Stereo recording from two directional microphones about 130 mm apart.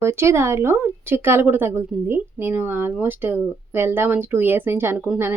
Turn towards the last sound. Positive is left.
turn(degrees=-15)  # may be behind; listen again after turning